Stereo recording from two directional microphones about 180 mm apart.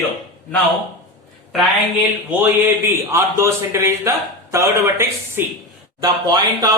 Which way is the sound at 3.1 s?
15° right (ahead or behind).